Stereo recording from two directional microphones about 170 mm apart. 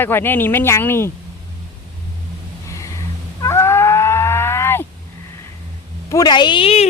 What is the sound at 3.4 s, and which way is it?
Livestock, 15° left (ahead or behind).